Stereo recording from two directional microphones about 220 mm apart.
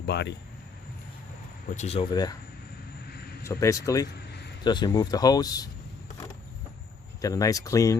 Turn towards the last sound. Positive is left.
turn(degrees=15)  # may be behind; listen again after turning